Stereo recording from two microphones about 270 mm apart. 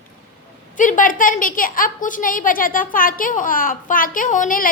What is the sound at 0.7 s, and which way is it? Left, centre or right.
A woman's voice, left.